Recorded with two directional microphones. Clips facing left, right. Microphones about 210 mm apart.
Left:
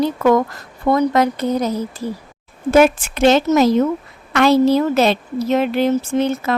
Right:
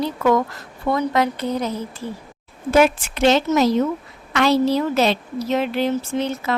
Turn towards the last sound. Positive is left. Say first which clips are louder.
# left 5 dB
turn(degrees=50)  # may be behind; listen again after turning